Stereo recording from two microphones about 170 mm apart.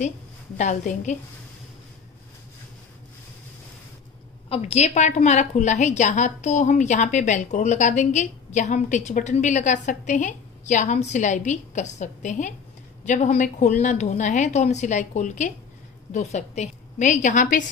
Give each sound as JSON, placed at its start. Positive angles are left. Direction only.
{"t": 0.6, "sound": "a woman's voice", "side_deg": 45}
{"t": 4.5, "sound": "a woman's voice", "side_deg": 40}